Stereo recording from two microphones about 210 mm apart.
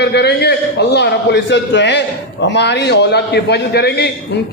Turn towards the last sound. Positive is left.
turn(degrees=50)  # may be behind; listen again after turning